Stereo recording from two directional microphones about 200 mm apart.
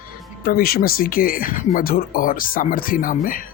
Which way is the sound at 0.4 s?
50° left (ahead or behind).